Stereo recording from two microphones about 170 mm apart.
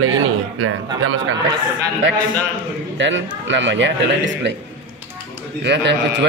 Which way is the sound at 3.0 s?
90° right.